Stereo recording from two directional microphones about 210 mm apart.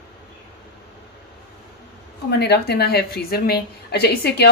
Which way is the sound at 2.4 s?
50° left (ahead or behind).